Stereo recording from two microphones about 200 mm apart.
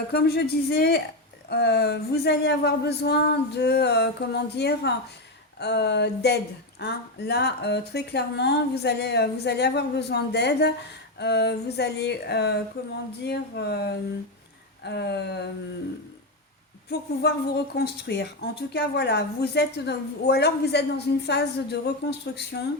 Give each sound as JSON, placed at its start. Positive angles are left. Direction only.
{"t": 0.1, "sound": "a woman's voice", "side_deg": 50}
{"t": 16.9, "sound": "a woman's voice", "side_deg": 55}